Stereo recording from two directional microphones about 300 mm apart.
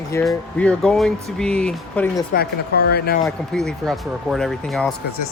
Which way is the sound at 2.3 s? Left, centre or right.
Left.